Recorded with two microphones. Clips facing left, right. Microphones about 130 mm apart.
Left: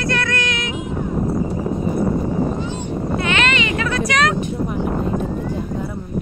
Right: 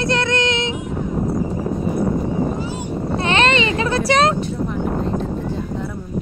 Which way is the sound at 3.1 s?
30° right (ahead or behind).